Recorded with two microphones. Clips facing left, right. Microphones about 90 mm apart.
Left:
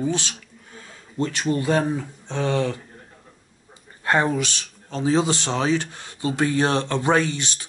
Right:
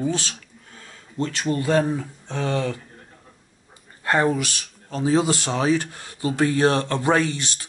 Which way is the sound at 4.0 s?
25° left (ahead or behind).